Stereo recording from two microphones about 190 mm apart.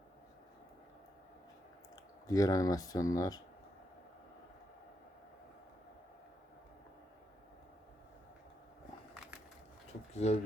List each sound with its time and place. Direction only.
2.2 s speech: 20° left (ahead or behind)
10.2 s speech: 35° left (ahead or behind)